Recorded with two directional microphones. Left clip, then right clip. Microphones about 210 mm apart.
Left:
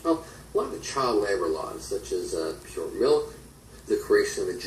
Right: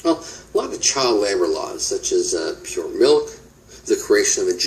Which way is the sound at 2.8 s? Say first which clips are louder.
Right 7 dB; 50° right (ahead or behind).